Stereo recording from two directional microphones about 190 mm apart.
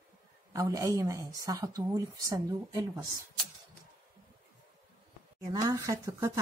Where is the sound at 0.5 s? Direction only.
15° right (ahead or behind).